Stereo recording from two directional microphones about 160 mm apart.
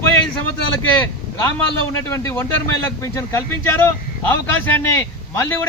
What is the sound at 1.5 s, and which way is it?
A man's voice, 15° left (ahead or behind).